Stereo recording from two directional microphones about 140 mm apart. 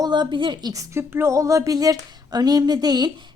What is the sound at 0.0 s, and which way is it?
A woman's voice, 30° right (ahead or behind).